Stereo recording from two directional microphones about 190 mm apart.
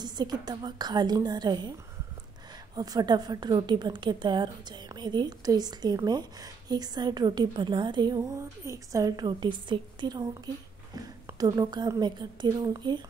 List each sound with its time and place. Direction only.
0.0 s a woman's voice: 20° right (ahead or behind)
2.7 s a woman's voice: 20° right (ahead or behind)